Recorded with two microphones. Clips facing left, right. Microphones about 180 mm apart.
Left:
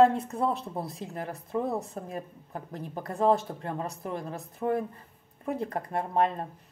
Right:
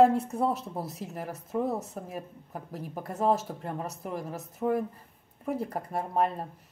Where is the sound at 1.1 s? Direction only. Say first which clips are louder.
Left 1 dB; 5° right (ahead or behind).